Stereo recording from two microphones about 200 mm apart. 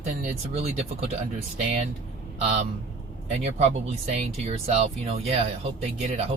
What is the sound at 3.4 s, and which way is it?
Speech, 35° right (ahead or behind).